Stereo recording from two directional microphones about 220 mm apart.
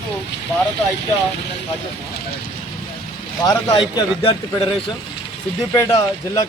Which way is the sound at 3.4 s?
15° left (ahead or behind).